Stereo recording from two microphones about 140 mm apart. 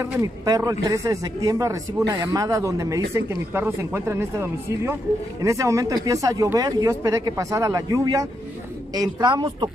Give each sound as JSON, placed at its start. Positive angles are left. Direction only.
{"t": 0.0, "sound": "speech", "side_deg": -25}